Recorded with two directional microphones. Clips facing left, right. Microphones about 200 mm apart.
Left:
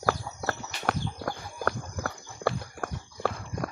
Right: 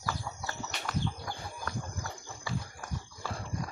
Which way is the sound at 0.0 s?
70° left (ahead or behind).